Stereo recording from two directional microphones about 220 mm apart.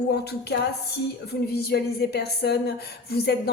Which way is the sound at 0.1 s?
45° left (ahead or behind).